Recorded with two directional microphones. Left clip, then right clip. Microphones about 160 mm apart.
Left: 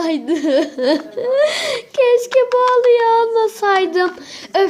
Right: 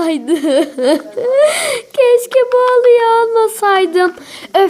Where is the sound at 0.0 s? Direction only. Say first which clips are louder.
Right 3 dB; 35° right (ahead or behind).